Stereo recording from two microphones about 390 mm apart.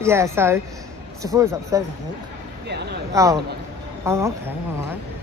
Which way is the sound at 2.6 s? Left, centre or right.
Right.